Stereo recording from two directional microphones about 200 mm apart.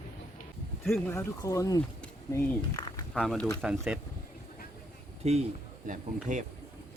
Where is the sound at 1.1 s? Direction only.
15° left (ahead or behind).